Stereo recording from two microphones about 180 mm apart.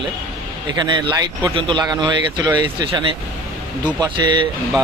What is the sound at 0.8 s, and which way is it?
Speech, 25° right (ahead or behind).